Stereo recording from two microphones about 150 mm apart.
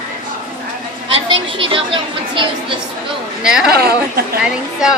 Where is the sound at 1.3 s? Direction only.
35° right (ahead or behind).